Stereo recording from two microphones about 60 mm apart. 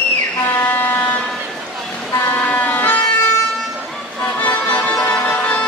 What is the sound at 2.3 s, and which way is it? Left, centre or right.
Vehicle, left.